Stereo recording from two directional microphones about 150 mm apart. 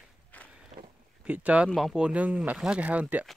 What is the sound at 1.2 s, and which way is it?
Speech, 10° right (ahead or behind).